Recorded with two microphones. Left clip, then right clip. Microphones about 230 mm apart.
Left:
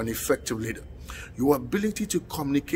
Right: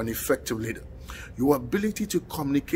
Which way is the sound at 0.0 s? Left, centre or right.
Centre.